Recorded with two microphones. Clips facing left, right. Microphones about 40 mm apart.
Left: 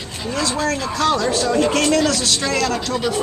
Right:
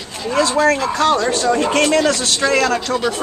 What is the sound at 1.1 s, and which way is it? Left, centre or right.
A man's voice, centre.